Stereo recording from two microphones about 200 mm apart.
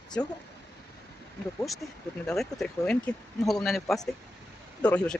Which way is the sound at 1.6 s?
Centre (ahead or behind).